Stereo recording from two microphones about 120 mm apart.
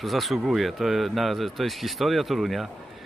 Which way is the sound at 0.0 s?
Centre (ahead or behind).